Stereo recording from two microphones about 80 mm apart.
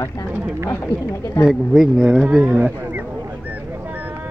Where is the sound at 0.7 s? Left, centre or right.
Left.